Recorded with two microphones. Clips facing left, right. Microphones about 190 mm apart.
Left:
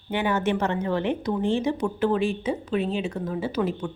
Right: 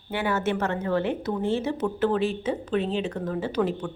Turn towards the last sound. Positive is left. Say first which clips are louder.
# even
turn(degrees=10)  # may be behind; listen again after turning